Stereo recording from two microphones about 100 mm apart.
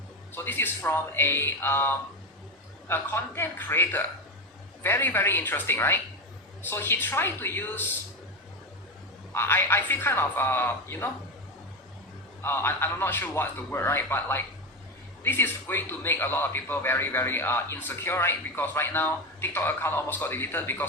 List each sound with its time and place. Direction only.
0.3 s a man's voice: 20° left (ahead or behind)
9.3 s a man's voice: 20° left (ahead or behind)
12.4 s a man's voice: 25° left (ahead or behind)